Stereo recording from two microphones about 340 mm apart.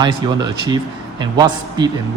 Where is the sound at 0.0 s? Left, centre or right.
Centre.